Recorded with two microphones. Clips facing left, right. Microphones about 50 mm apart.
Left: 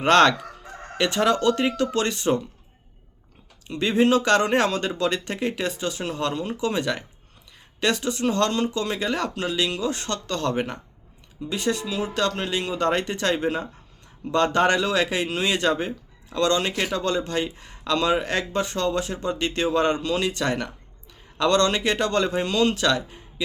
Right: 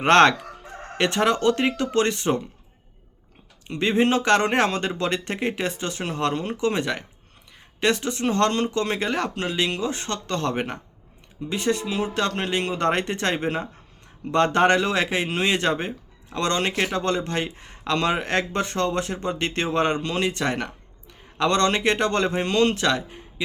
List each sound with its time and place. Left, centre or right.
0.0 s speech: right
3.7 s speech: right
20.4 s speech: right